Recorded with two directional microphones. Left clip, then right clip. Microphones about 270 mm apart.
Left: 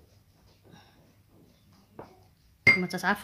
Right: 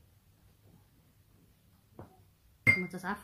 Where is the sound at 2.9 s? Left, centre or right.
Left.